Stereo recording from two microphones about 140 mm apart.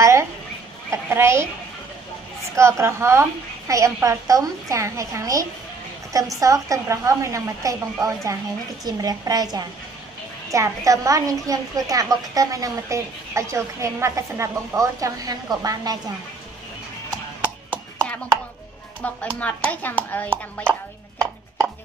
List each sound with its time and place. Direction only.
0.0 s a sound: 20° right (ahead or behind)
0.8 s speech: 20° right (ahead or behind)
2.5 s a woman's voice: 20° right (ahead or behind)
19.2 s speech: 10° left (ahead or behind)